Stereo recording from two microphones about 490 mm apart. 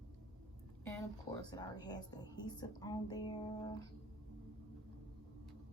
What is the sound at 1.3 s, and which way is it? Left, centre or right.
A woman's voice, centre.